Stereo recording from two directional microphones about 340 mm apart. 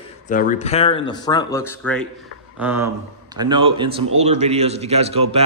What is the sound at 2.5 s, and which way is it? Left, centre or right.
A man's voice, centre.